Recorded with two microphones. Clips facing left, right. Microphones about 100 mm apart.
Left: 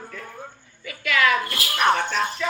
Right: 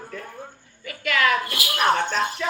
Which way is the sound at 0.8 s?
45° right (ahead or behind).